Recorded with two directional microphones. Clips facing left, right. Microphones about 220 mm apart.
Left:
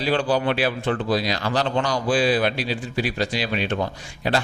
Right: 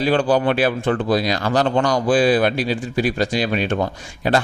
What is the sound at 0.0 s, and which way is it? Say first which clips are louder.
Speech: right 4 dB; 50° right (ahead or behind).